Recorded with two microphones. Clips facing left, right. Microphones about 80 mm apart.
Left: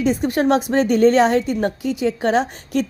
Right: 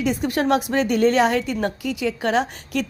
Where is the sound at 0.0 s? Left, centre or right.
Left.